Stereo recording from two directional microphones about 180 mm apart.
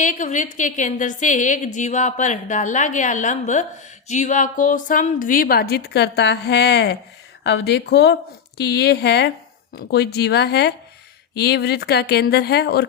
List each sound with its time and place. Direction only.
0.0 s a woman's voice: 45° left (ahead or behind); by 12.9 s 65° left (ahead or behind)